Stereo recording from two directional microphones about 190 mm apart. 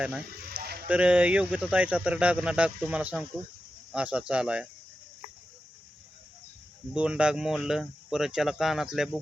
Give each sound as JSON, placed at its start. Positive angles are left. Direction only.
{"t": 0.5, "sound": "a sound", "side_deg": -55}
{"t": 0.9, "sound": "speech", "side_deg": -5}
{"t": 6.9, "sound": "speech", "side_deg": -5}